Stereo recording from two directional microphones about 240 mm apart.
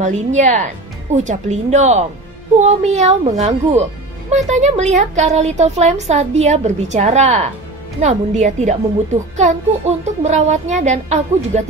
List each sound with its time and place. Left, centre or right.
0.0 s a woman's voice: right